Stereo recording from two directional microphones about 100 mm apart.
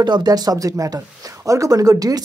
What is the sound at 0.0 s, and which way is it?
Speech, 45° right (ahead or behind).